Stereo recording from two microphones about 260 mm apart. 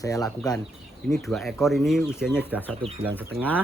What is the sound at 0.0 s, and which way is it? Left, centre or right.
Speech, centre.